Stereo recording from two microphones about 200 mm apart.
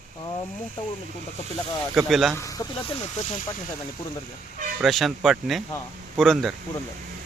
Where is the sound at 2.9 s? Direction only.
35° left (ahead or behind).